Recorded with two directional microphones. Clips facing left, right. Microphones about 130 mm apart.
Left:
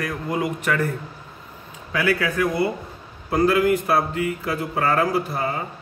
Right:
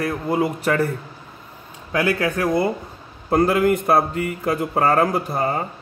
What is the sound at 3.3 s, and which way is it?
Speech, 50° right (ahead or behind).